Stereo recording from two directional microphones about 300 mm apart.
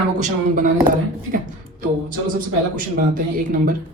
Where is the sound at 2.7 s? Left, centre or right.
Right.